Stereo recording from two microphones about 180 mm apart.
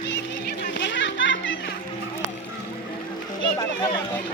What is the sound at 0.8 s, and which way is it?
Children playing, 85° left.